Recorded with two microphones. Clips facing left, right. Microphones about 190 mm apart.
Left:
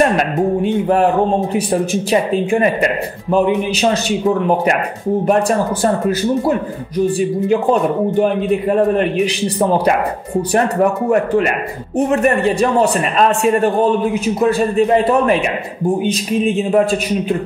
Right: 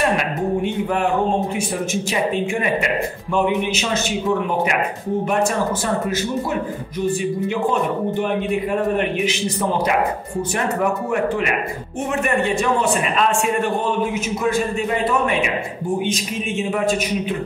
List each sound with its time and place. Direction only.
0.2 s a man's voice: 35° left (ahead or behind)
11.1 s a man's voice: 40° left (ahead or behind)